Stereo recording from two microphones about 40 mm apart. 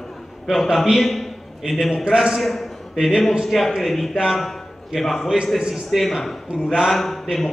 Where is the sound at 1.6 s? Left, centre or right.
Centre.